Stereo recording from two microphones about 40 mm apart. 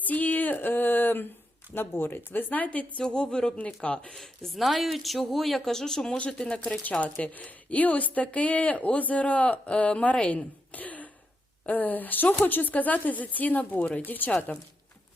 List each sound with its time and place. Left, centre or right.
0.0 s a sound: left
1.7 s speech: left
3.0 s a woman's voice: left
4.5 s a woman's voice: centre; by 6.7 s left
6.9 s speech: left